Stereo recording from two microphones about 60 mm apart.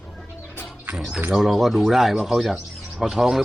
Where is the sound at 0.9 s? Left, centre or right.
Centre.